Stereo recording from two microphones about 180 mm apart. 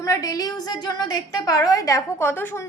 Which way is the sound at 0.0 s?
20° left (ahead or behind).